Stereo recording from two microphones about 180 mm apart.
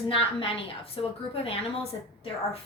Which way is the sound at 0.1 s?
30° left (ahead or behind).